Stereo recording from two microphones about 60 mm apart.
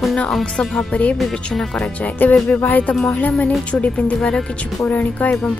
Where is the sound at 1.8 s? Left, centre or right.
Left.